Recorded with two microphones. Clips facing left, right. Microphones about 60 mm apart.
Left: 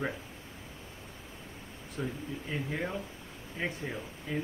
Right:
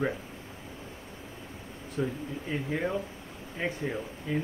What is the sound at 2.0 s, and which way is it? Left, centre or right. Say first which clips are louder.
Speech: right 5 dB; centre.